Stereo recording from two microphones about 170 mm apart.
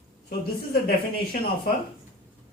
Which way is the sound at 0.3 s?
65° left (ahead or behind).